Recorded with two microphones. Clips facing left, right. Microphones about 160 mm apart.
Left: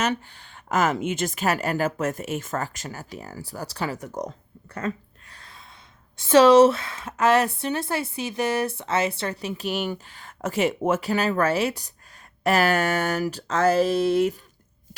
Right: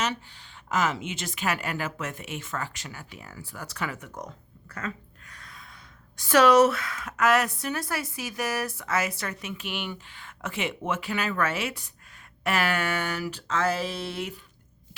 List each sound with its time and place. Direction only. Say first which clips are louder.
0.0 s a woman's voice: left 5 dB; 50° left (ahead or behind)